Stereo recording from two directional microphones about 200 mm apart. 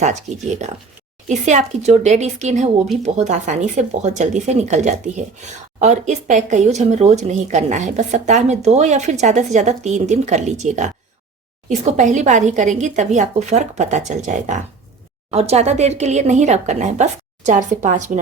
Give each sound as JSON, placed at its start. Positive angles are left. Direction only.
{"t": 0.0, "sound": "speech", "side_deg": -35}